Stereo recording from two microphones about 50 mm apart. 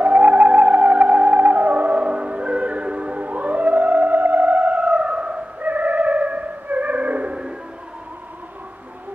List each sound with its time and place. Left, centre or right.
0.0 s theremin: right